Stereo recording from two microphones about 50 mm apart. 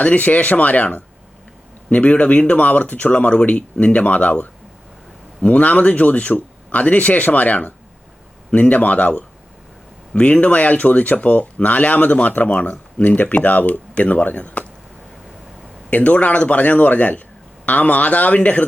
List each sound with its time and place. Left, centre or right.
0.0 s speech: left
15.9 s speech: left